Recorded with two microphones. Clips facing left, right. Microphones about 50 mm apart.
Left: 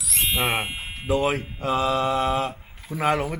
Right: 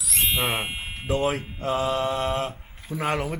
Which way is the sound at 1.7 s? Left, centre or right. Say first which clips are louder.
Left 3 dB; left.